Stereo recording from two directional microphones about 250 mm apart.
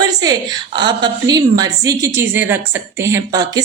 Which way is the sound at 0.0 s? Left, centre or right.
Centre.